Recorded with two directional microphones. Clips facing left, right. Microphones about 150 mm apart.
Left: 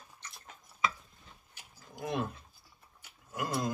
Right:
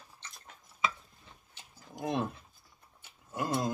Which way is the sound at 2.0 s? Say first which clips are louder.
Right 2 dB; 25° right (ahead or behind).